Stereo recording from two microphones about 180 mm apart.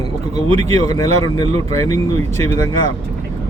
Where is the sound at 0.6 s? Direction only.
20° left (ahead or behind).